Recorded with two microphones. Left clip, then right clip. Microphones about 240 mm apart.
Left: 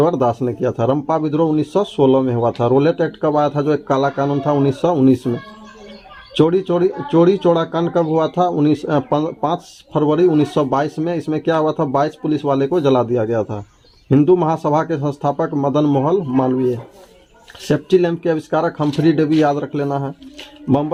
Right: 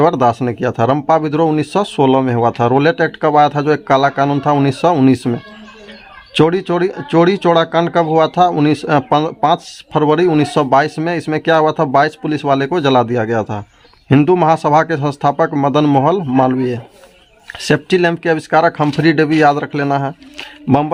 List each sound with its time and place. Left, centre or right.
0.0 s speech: right
6.3 s speech: right
17.7 s speech: right